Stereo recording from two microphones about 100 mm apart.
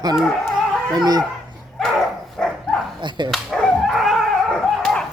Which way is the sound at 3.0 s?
50° right (ahead or behind).